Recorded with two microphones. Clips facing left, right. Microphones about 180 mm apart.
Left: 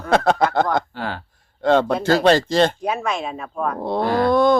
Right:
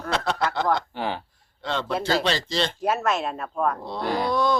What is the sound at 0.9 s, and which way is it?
Speech, 15° right (ahead or behind).